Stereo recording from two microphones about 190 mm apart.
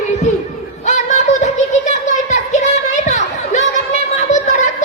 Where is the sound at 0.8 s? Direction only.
35° left (ahead or behind).